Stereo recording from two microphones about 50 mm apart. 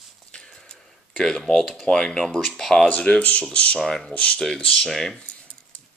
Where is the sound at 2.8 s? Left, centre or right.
Left.